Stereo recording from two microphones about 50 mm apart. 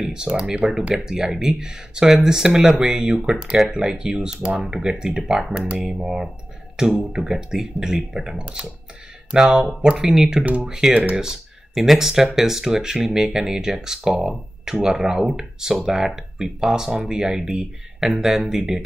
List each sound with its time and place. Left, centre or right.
0.0 s speech: centre
10.4 s speech: right
11.1 s speech: centre